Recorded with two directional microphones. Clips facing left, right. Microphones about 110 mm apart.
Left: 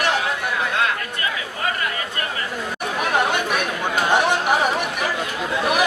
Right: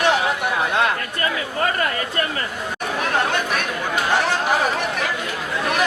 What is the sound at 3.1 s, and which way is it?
Chatter, 10° left (ahead or behind).